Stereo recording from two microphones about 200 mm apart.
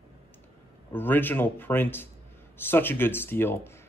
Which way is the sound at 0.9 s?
10° left (ahead or behind).